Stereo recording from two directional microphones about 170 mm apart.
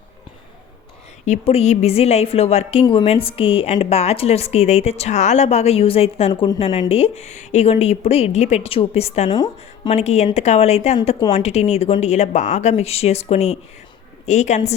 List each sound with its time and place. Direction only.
1.2 s a woman's voice: 40° left (ahead or behind)